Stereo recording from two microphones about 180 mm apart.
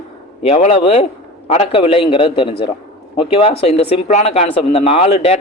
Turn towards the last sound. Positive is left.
turn(degrees=35)  # may be behind; listen again after turning